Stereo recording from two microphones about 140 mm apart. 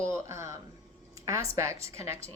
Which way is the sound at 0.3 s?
20° right (ahead or behind).